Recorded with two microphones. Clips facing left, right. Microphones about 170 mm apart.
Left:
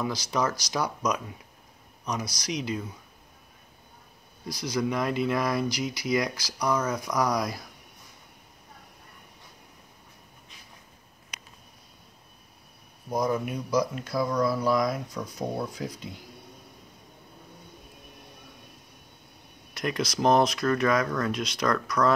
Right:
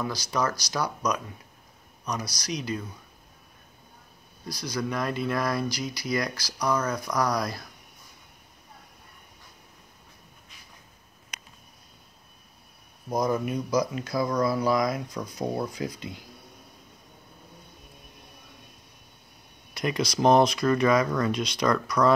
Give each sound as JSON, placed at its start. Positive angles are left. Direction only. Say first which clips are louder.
{"t": 0.0, "sound": "speech", "louder": "even", "side_deg": 20}
{"t": 2.4, "sound": "speech", "louder": "even", "side_deg": 20}
{"t": 4.5, "sound": "speech", "louder": "left 2 dB", "side_deg": 20}
{"t": 6.6, "sound": "speech", "louder": "even", "side_deg": 5}
{"t": 7.2, "sound": "speech", "louder": "even", "side_deg": 20}
{"t": 13.1, "sound": "speech", "louder": "right 1 dB", "side_deg": 5}
{"t": 19.7, "sound": "speech", "louder": "right 2 dB", "side_deg": 0}